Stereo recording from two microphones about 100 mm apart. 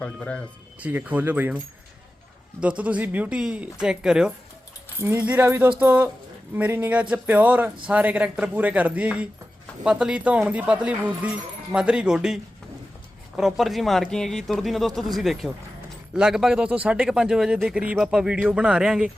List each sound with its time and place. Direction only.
0.0 s speech: 10° left (ahead or behind)
0.8 s speech: 15° right (ahead or behind)
2.6 s speech: 10° right (ahead or behind)
4.9 s a man's voice: 20° right (ahead or behind)